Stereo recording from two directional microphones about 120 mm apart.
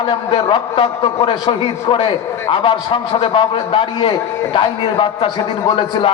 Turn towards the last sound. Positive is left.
turn(degrees=45)  # may be behind; listen again after turning